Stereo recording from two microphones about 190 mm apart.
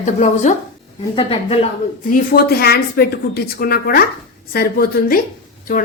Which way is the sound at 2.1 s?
50° left (ahead or behind).